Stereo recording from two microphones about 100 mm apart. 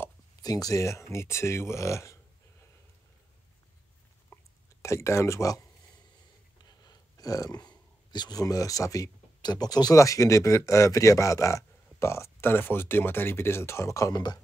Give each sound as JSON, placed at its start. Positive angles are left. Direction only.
{"t": 0.4, "sound": "speech", "side_deg": 40}
{"t": 4.3, "sound": "a sound", "side_deg": 25}
{"t": 4.8, "sound": "speech", "side_deg": 30}
{"t": 6.6, "sound": "speech", "side_deg": 40}